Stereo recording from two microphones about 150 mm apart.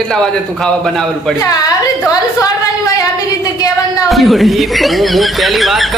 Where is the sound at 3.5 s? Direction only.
25° left (ahead or behind).